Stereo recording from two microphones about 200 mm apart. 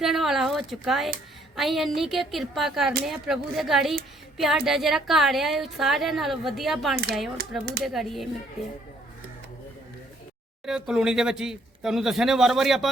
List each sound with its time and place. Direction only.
0.0 s a woman's voice: centre (ahead or behind)
7.6 s speech: 50° right (ahead or behind)
7.9 s a woman's voice: centre (ahead or behind)
10.7 s a woman's voice: 5° right (ahead or behind)